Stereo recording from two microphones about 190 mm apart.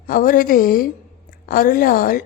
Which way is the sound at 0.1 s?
45° left (ahead or behind).